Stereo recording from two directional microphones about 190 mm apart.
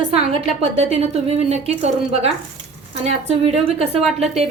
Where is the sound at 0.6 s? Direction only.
35° right (ahead or behind).